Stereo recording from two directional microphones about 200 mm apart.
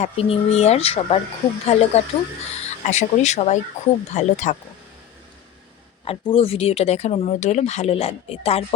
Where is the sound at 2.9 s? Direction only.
35° left (ahead or behind).